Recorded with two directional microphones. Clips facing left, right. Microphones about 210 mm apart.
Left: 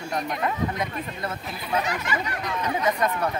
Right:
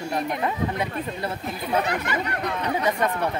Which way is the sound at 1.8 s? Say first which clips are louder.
Right 2 dB; 60° right (ahead or behind).